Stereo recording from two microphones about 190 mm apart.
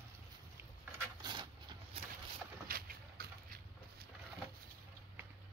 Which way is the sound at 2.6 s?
50° right (ahead or behind).